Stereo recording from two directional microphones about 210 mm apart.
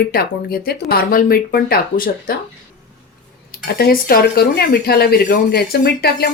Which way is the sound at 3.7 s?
45° left (ahead or behind).